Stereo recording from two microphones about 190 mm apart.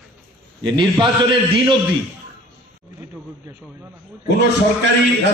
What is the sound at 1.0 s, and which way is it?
Speech, 25° right (ahead or behind).